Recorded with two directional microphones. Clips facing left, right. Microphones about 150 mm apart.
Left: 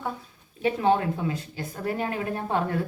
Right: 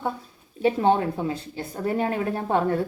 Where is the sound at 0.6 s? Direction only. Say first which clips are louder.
Right 2 dB; 30° right (ahead or behind).